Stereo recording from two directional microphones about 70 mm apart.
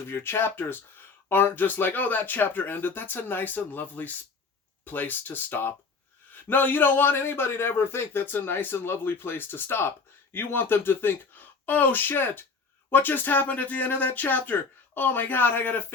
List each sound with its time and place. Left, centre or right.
0.1 s a man's voice: left